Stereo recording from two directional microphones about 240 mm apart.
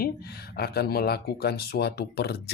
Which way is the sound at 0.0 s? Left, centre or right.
Left.